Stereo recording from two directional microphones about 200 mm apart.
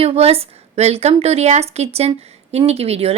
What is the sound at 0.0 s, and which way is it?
A woman's voice, 30° right (ahead or behind).